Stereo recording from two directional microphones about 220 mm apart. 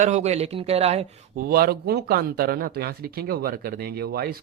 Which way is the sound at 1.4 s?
45° right (ahead or behind).